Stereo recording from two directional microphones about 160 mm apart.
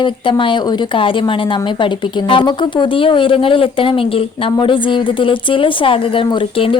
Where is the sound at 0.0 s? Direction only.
30° left (ahead or behind).